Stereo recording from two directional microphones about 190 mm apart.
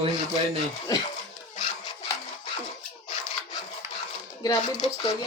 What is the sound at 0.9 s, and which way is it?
Speech, 20° left (ahead or behind).